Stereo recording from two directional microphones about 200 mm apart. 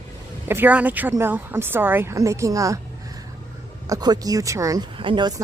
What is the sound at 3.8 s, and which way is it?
Speech, 20° right (ahead or behind).